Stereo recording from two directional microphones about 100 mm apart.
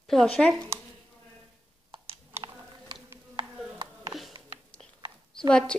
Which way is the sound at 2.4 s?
55° right (ahead or behind).